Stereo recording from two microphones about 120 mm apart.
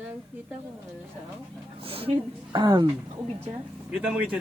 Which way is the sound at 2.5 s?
40° right (ahead or behind).